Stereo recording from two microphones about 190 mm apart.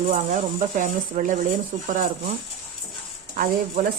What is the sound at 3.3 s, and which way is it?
Speech, 45° right (ahead or behind).